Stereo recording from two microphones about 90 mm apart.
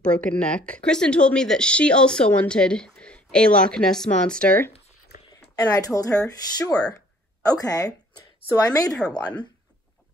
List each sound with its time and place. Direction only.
0.0 s speech: 15° left (ahead or behind)
5.6 s speech: 45° left (ahead or behind)